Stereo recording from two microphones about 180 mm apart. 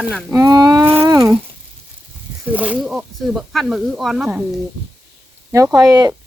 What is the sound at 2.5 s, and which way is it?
A woman's voice, 10° right (ahead or behind).